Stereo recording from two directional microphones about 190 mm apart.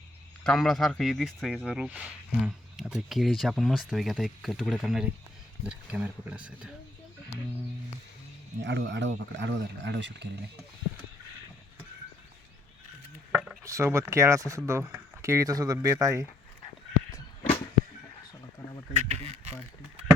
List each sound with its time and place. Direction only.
0.4 s speech: centre (ahead or behind)
8.6 s speech: 65° right (ahead or behind)
13.3 s chop: 5° right (ahead or behind)
13.7 s speech: 15° right (ahead or behind)
19.0 s a sound: 35° right (ahead or behind)